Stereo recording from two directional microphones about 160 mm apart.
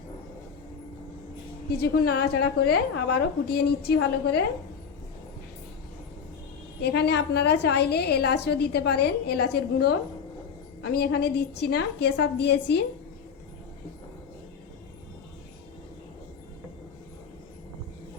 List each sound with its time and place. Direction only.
1.7 s a woman's voice: 85° left
6.8 s a woman's voice: 90° left
10.8 s a woman's voice: 80° left